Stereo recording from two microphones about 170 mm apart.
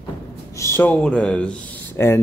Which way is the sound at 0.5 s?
15° left (ahead or behind).